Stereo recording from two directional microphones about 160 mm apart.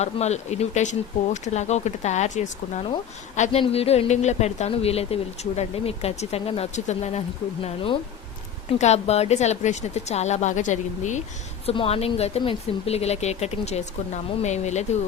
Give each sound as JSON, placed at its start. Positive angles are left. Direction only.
{"t": 0.0, "sound": "a woman's voice", "side_deg": 45}
{"t": 8.7, "sound": "speech", "side_deg": 40}
{"t": 11.6, "sound": "a woman's voice", "side_deg": 35}